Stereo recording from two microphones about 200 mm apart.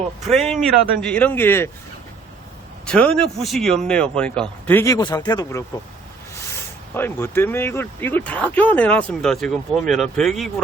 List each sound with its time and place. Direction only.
0.3 s speech: centre (ahead or behind)
2.8 s speech: 5° left (ahead or behind)
6.9 s speech: 10° left (ahead or behind)